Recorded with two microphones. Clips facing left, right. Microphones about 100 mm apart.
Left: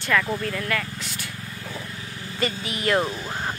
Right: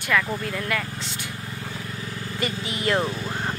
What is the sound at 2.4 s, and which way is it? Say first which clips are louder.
Speech: left 2 dB; 15° right (ahead or behind).